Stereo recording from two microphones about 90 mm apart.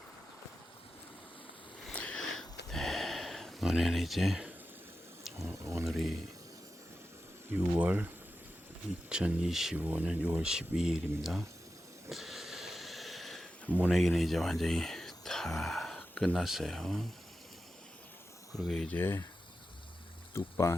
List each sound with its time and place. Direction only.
1.9 s sniff: 10° left (ahead or behind)
5.6 s speech: 35° right (ahead or behind)
5.9 s speech: centre (ahead or behind)
7.5 s speech: 20° right (ahead or behind)
9.7 s speech: 20° right (ahead or behind)
10.4 s speech: 5° right (ahead or behind)
12.0 s a sound: centre (ahead or behind)
13.9 s speech: centre (ahead or behind)
18.5 s speech: 5° left (ahead or behind)
18.9 s speech: 25° left (ahead or behind)
20.3 s speech: 35° left (ahead or behind)